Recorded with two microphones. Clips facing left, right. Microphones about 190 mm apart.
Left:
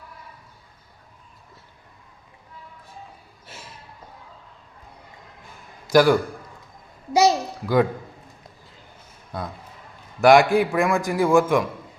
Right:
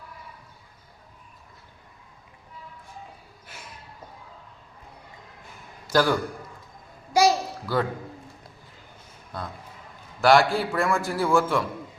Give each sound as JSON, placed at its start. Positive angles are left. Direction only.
{"t": 5.9, "sound": "a man's voice", "side_deg": 10}
{"t": 7.1, "sound": "babbling", "side_deg": 20}
{"t": 10.2, "sound": "a man's voice", "side_deg": 15}